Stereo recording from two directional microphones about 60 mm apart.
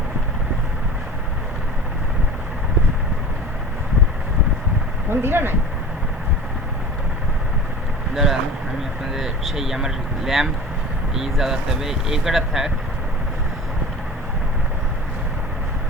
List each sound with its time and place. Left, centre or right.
5.1 s speech: right
8.1 s speech: centre